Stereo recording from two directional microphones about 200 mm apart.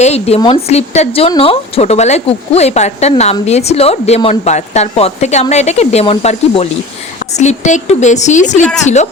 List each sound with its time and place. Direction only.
0.0 s speech: 30° left (ahead or behind)